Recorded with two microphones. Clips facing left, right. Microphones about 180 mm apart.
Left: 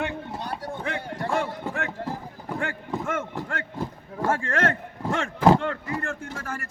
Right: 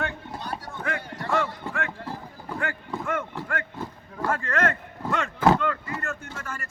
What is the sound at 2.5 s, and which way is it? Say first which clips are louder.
Clip-clop: left 2 dB; 20° left (ahead or behind).